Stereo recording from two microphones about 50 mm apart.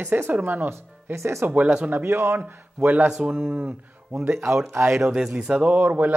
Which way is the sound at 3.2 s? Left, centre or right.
Right.